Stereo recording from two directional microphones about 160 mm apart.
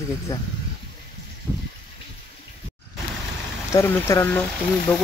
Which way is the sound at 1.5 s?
10° right (ahead or behind).